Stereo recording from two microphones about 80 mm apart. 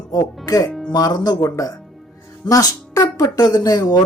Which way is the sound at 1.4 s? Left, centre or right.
Left.